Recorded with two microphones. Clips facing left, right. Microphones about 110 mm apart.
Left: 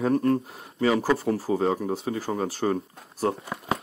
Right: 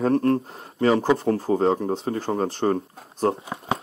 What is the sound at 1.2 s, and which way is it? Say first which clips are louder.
Speech: right 3 dB; 45° right (ahead or behind).